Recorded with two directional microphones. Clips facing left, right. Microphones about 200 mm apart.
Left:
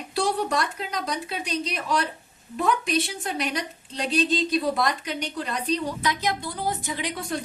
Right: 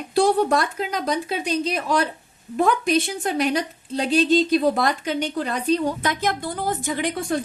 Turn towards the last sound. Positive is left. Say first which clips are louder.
# right 6 dB
turn(degrees=-50)  # may be behind; listen again after turning